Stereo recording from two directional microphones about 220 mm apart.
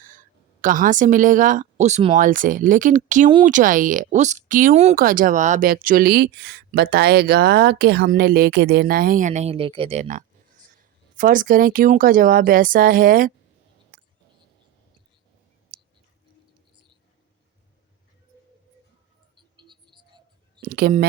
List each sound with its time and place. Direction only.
0.0 s a woman's voice: 40° right (ahead or behind)
13.9 s a sound: 40° right (ahead or behind)
19.4 s music: 20° right (ahead or behind)
20.6 s speech: 45° right (ahead or behind)